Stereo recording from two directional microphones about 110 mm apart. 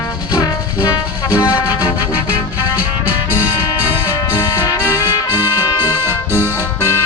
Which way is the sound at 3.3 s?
35° left (ahead or behind).